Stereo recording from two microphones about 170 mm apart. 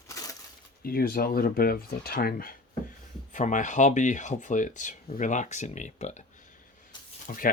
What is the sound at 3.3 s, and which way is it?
Speech, 45° left (ahead or behind).